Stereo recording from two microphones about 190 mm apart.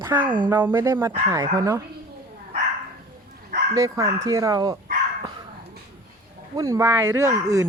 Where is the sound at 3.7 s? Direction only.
15° right (ahead or behind).